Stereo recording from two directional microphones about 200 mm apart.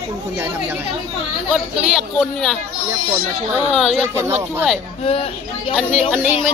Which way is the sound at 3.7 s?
Centre (ahead or behind).